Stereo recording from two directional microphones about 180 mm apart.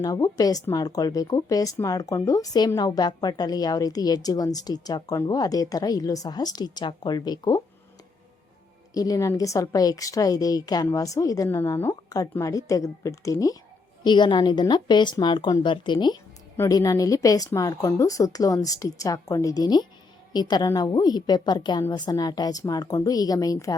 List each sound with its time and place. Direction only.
0.0 s a woman's voice: 20° left (ahead or behind)
8.9 s a woman's voice: 20° left (ahead or behind)